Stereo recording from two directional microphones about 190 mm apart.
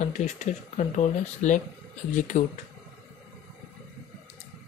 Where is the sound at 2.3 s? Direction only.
40° left (ahead or behind).